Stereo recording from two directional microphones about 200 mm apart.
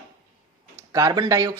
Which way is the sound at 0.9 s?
20° right (ahead or behind).